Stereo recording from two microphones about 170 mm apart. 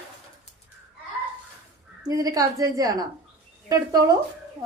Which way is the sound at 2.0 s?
20° right (ahead or behind).